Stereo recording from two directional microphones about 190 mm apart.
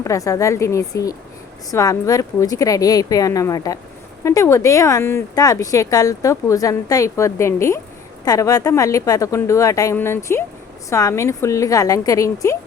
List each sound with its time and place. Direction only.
0.0 s speech: 15° left (ahead or behind)